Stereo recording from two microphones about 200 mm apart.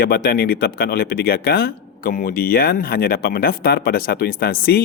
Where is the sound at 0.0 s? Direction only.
50° left (ahead or behind).